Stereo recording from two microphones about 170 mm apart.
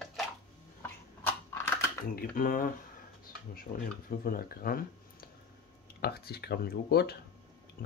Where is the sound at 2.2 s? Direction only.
55° left (ahead or behind).